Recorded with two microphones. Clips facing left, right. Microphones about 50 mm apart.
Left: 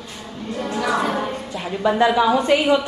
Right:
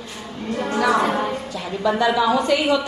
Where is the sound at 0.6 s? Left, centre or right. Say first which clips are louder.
Right 3 dB; right.